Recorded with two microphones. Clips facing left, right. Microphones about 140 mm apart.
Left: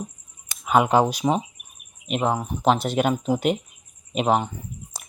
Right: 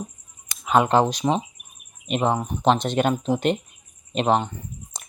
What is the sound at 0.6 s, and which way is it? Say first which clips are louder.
Speech: even; 5° left (ahead or behind).